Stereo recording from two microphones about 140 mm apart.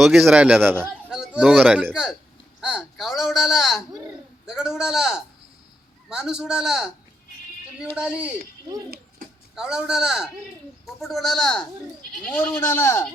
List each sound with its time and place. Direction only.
0.0 s speech: centre (ahead or behind)
1.1 s speech: 5° right (ahead or behind)
7.9 s speech: 10° right (ahead or behind)
9.6 s speech: 5° right (ahead or behind); by 13.1 s 20° left (ahead or behind)